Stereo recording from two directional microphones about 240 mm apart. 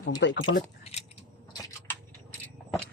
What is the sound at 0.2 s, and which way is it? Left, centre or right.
Speech, left.